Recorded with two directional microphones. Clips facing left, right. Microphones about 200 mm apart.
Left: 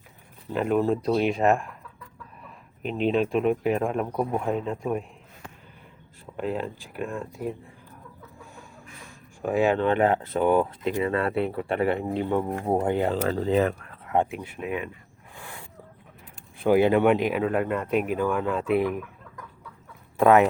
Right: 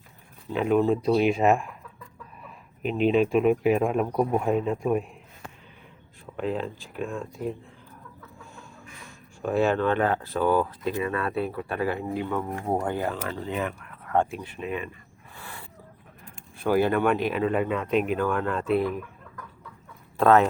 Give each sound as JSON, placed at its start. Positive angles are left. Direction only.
{"t": 0.5, "sound": "speech", "side_deg": 0}
{"t": 2.8, "sound": "speech", "side_deg": -5}
{"t": 6.3, "sound": "speech", "side_deg": 5}
{"t": 9.4, "sound": "speech", "side_deg": 15}
{"t": 14.1, "sound": "speech", "side_deg": 15}
{"t": 15.4, "sound": "a sound", "side_deg": 15}
{"t": 16.6, "sound": "speech", "side_deg": 20}
{"t": 17.4, "sound": "speech", "side_deg": 5}
{"t": 20.1, "sound": "speech", "side_deg": 15}